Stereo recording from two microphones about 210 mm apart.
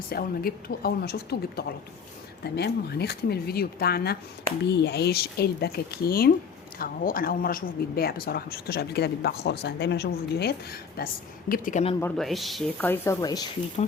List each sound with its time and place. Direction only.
0.1 s speech: 45° left (ahead or behind)
11.9 s speech: 5° left (ahead or behind)